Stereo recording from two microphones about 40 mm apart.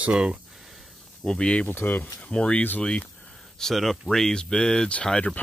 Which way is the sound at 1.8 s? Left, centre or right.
Left.